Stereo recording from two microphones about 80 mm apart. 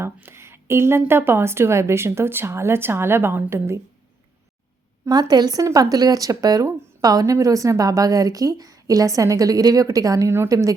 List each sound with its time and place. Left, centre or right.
0.0 s speech: right
5.3 s a woman's voice: right
10.5 s a woman's voice: right